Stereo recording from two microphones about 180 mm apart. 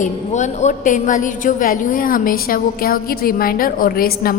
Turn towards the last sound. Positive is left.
turn(degrees=55)  # may be behind; listen again after turning